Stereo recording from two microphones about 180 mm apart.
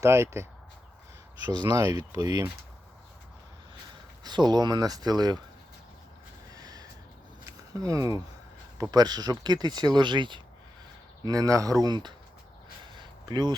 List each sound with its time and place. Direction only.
0.0 s speech: 15° right (ahead or behind)
1.5 s speech: 25° right (ahead or behind)
4.2 s speech: 25° right (ahead or behind)
6.5 s a sound: 20° right (ahead or behind)
7.7 s speech: 20° right (ahead or behind)
12.8 s a sound: 25° right (ahead or behind)